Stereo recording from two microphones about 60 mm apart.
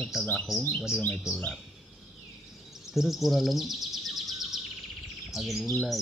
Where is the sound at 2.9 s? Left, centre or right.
Centre.